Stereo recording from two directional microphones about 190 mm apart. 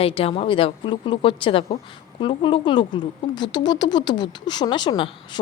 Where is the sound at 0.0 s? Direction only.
30° left (ahead or behind).